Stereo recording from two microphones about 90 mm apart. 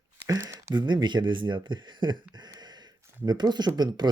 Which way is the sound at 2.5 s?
55° right (ahead or behind).